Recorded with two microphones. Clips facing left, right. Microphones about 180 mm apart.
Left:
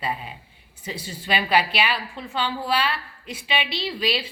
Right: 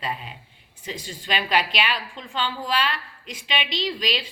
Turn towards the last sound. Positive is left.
turn(degrees=10)  # may be behind; listen again after turning